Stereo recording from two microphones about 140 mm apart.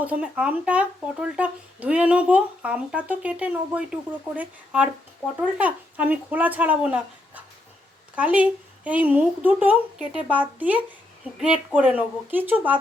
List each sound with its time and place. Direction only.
0.0 s speech: 10° right (ahead or behind)